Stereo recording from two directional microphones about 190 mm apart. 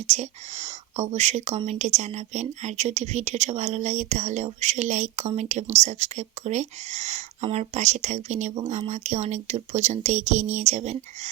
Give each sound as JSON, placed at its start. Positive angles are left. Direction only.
{"t": 0.1, "sound": "speech", "side_deg": -35}